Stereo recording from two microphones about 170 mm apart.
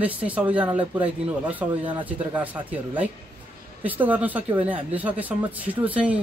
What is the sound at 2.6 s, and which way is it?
Speech, 10° right (ahead or behind).